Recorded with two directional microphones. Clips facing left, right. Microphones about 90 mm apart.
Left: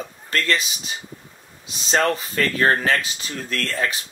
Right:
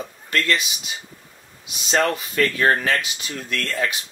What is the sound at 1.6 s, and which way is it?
Speech, 35° left (ahead or behind).